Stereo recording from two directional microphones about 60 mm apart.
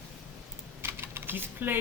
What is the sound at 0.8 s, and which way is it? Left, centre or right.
Typing, right.